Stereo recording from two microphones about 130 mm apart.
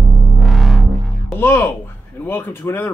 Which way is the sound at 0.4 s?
Centre (ahead or behind).